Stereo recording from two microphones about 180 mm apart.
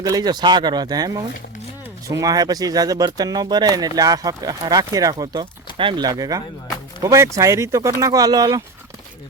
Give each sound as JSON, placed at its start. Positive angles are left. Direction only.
{"t": 0.0, "sound": "speech", "side_deg": -20}